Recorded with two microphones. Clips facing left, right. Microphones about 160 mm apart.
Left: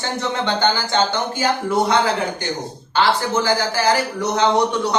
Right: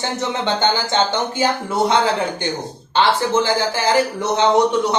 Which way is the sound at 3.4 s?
25° right (ahead or behind).